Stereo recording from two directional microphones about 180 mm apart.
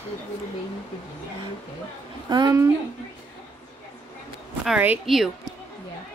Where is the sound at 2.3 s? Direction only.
25° right (ahead or behind).